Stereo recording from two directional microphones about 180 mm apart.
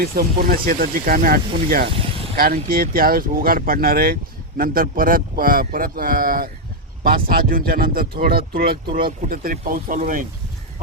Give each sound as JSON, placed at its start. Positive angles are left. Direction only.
{"t": 0.0, "sound": "speech", "side_deg": -55}